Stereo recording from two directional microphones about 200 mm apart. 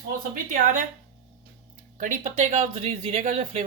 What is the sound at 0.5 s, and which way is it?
Speech, 40° right (ahead or behind).